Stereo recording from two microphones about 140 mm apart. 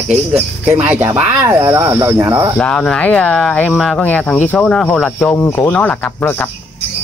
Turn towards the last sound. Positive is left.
turn(degrees=10)  # may be behind; listen again after turning